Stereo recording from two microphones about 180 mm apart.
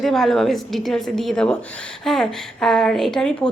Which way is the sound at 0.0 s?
Centre (ahead or behind).